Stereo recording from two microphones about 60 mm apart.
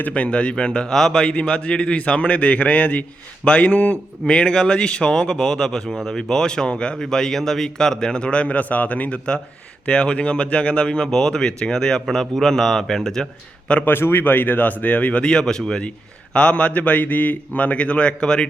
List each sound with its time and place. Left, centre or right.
0.0 s a man's voice: centre
4.3 s a man's voice: centre
11.1 s a man's voice: centre
13.8 s speech: left
15.2 s a man's voice: centre